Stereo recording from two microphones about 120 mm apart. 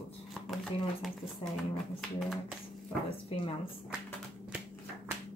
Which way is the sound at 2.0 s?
Centre (ahead or behind).